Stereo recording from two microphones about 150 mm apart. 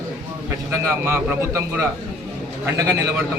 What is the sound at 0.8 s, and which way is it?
Speech, 15° right (ahead or behind).